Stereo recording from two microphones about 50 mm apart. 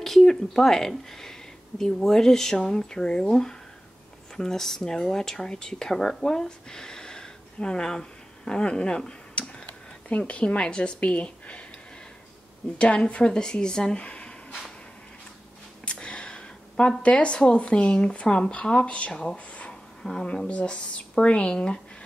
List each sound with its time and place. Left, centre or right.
0.0 s speech: centre; by 11.6 s left
12.7 s speech: left
15.8 s a sound: left
17.0 s a woman's voice: left
19.7 s a sound: centre
20.4 s a woman's voice: left